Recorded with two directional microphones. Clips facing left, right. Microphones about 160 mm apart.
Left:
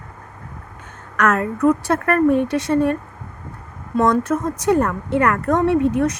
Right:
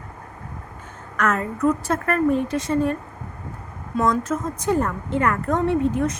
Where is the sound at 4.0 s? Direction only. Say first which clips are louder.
Left 4 dB; 65° left (ahead or behind).